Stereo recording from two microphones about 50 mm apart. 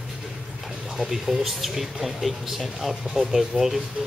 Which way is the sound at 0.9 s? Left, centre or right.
Centre.